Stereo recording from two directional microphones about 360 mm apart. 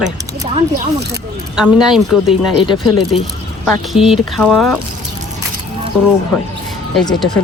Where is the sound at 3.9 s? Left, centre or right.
Centre.